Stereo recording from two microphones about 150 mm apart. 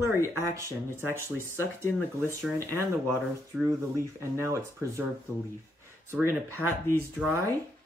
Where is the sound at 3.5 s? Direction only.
Centre (ahead or behind).